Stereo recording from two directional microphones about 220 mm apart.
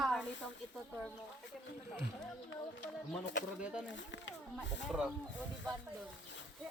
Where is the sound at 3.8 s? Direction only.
55° left (ahead or behind).